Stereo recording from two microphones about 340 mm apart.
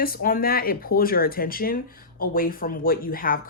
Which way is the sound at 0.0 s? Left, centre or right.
Left.